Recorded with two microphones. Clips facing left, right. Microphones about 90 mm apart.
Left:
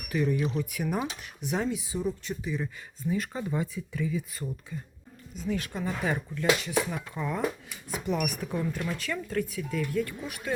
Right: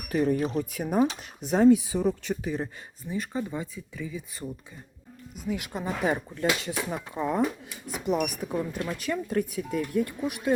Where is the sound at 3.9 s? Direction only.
10° right (ahead or behind).